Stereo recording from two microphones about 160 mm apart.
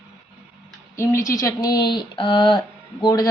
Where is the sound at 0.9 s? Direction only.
20° left (ahead or behind).